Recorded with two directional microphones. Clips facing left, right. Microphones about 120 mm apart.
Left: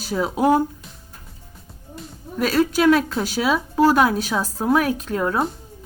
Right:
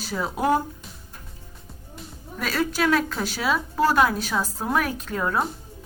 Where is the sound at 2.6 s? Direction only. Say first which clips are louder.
Left 6 dB; 20° left (ahead or behind).